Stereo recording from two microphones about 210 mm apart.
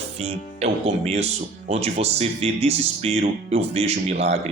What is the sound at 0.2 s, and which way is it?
Speech, 30° right (ahead or behind).